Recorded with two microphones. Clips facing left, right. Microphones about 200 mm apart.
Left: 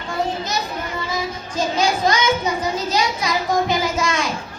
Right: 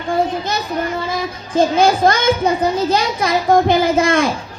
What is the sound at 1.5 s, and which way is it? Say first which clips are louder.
A man's voice: right 7 dB; 55° right (ahead or behind).